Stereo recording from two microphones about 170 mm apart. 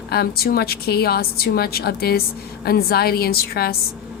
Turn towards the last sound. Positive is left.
turn(degrees=65)  # may be behind; listen again after turning